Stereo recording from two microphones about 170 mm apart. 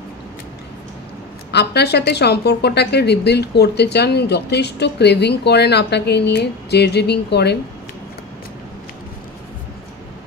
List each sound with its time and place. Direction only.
1.5 s a woman's voice: 75° left (ahead or behind)